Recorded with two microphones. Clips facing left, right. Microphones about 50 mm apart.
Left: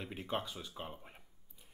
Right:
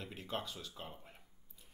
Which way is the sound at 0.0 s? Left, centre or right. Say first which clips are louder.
Left 3 dB; centre.